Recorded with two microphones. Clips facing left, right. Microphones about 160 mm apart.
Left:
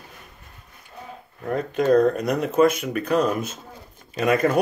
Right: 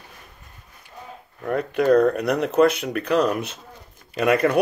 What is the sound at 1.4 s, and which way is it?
Speech, 60° right (ahead or behind).